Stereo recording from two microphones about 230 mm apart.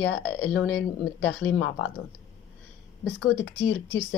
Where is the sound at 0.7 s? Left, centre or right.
Left.